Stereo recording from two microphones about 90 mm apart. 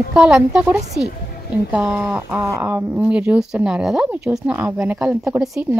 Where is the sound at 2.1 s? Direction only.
25° right (ahead or behind).